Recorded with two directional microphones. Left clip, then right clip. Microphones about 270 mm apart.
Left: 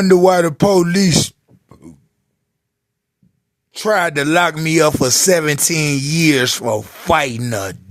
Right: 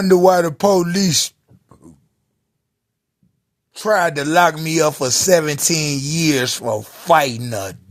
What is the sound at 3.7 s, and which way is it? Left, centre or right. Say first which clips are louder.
Speech: left 1 dB; left.